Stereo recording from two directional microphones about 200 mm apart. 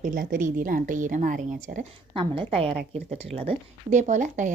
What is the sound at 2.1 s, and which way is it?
A woman's voice, 25° right (ahead or behind).